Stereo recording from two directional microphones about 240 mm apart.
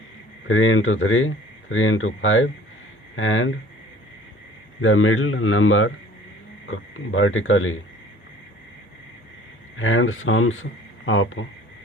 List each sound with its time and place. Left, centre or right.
0.4 s speech: left
4.8 s speech: left
9.7 s speech: left